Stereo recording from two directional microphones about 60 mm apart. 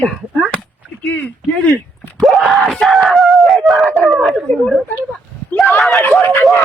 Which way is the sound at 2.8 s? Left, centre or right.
Centre.